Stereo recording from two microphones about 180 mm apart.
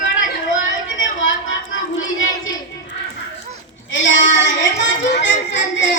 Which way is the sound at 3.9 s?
90° left.